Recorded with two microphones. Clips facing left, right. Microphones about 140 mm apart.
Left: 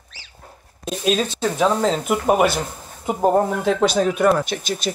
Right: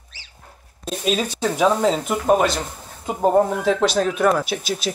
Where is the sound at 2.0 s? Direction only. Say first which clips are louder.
Left 1 dB; 5° left (ahead or behind).